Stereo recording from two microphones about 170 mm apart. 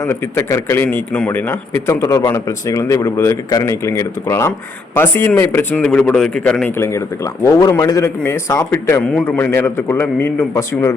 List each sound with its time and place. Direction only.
0.0 s a man's voice: 15° left (ahead or behind)
6.7 s a man's voice: 15° left (ahead or behind)